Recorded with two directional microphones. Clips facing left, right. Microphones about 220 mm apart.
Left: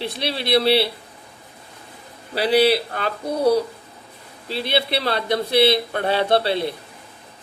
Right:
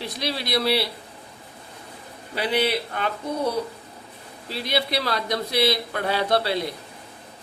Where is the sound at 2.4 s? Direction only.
35° left (ahead or behind).